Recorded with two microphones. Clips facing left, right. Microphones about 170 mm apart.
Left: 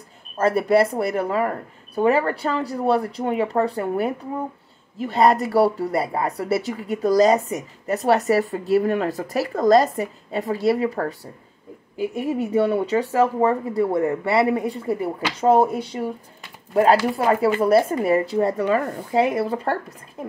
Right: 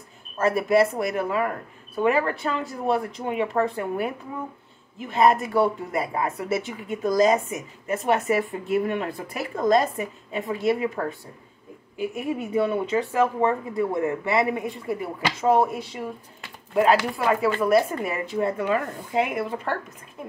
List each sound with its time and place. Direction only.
0.4 s speech: 30° left (ahead or behind)
15.9 s speech: 40° left (ahead or behind)
17.2 s speech: 30° left (ahead or behind)